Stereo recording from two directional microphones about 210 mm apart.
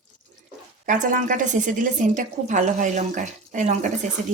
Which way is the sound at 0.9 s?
40° right (ahead or behind).